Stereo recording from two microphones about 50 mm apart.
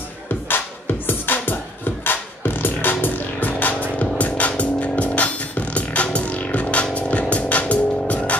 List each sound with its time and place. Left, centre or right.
0.5 s music: left